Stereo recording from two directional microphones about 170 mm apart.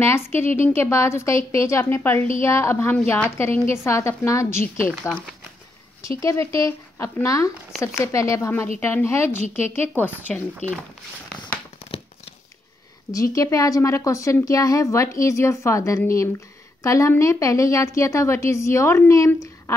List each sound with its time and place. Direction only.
0.0 s a woman's voice: 15° left (ahead or behind)
13.1 s a woman's voice: 20° left (ahead or behind)